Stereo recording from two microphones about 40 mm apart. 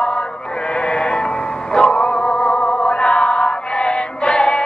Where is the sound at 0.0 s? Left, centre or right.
Left.